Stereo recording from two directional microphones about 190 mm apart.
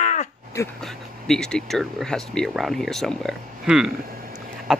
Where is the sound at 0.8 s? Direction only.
Centre (ahead or behind).